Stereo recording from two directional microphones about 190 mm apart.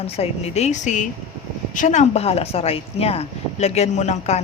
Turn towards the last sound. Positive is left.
turn(degrees=35)  # may be behind; listen again after turning